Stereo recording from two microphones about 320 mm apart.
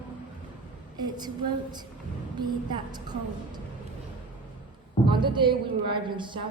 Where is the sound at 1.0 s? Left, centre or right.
Centre.